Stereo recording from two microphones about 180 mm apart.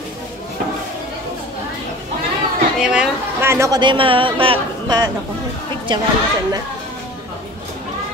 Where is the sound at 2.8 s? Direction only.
5° right (ahead or behind); by 5.1 s 25° right (ahead or behind).